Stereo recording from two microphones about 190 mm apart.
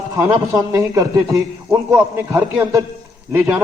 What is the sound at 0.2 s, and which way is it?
A man's voice, 15° right (ahead or behind).